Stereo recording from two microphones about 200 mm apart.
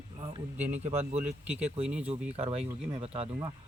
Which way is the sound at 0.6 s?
10° right (ahead or behind).